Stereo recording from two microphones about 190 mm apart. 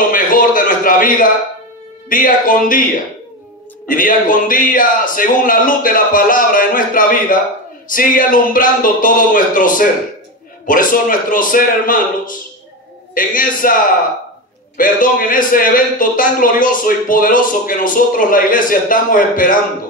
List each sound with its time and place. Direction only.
0.1 s a sound: 45° left (ahead or behind)
2.0 s a man's voice: 45° left (ahead or behind)
3.8 s a man's voice: 45° left (ahead or behind)
14.8 s a man's voice: 45° left (ahead or behind)